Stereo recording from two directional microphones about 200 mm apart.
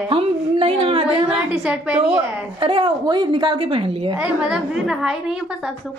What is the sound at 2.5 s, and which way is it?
A woman's voice, 25° right (ahead or behind).